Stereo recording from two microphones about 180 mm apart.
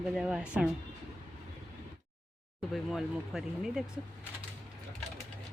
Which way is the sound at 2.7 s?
Centre (ahead or behind).